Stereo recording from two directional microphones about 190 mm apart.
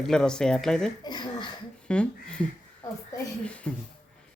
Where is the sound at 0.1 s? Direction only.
5° left (ahead or behind).